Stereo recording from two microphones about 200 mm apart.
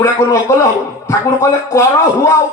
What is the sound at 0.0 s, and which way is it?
A man's voice, 15° left (ahead or behind).